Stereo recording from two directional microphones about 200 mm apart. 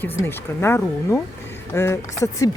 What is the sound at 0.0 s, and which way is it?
Speech, 10° left (ahead or behind).